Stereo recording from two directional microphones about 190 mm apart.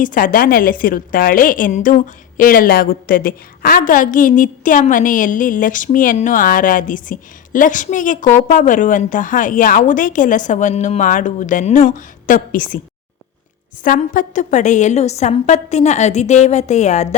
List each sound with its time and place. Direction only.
0.0 s a woman's voice: 45° left (ahead or behind)
13.8 s a woman's voice: 45° left (ahead or behind)